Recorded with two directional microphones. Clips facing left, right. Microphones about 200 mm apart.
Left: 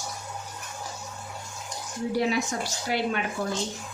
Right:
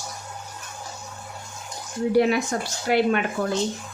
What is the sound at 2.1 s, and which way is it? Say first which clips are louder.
A woman's voice: right 6 dB; 60° right (ahead or behind).